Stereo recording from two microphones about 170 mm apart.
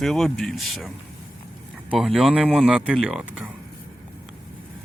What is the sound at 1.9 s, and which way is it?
Speech, centre (ahead or behind).